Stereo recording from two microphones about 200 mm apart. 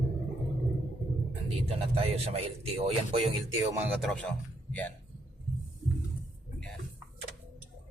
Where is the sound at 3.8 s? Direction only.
Centre (ahead or behind).